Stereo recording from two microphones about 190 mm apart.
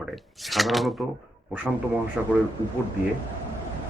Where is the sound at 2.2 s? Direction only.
5° right (ahead or behind).